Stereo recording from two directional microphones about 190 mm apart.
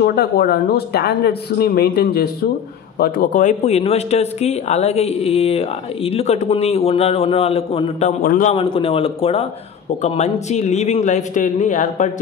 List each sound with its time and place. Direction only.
0.0 s speech: 55° left (ahead or behind)
3.0 s speech: 45° left (ahead or behind)
8.2 s a man's voice: 45° left (ahead or behind)
8.5 s speech: 25° left (ahead or behind)